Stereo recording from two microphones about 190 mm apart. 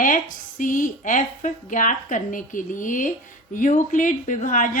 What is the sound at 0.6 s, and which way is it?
A woman's voice, 45° left (ahead or behind).